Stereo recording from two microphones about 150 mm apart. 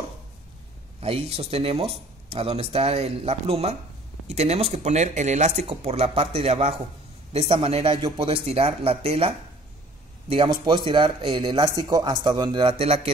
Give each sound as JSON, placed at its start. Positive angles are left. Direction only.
{"t": 1.0, "sound": "a man's voice", "side_deg": -40}
{"t": 10.3, "sound": "a man's voice", "side_deg": -35}